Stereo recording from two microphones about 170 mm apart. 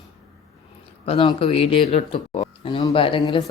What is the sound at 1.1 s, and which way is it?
Speech, 35° left (ahead or behind).